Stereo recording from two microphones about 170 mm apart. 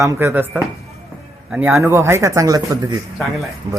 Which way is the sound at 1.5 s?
15° right (ahead or behind).